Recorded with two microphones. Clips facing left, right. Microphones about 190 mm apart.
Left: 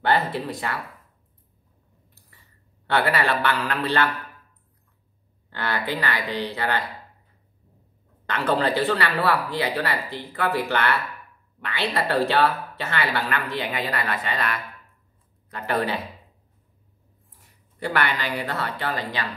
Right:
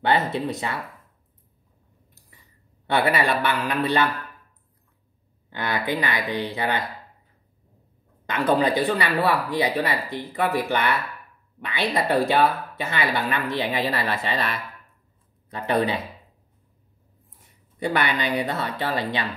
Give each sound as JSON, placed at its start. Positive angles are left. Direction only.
{"t": 0.0, "sound": "speech", "side_deg": -20}
{"t": 2.9, "sound": "speech", "side_deg": -15}
{"t": 5.5, "sound": "speech", "side_deg": -15}
{"t": 8.3, "sound": "speech", "side_deg": -15}
{"t": 17.7, "sound": "speech", "side_deg": -20}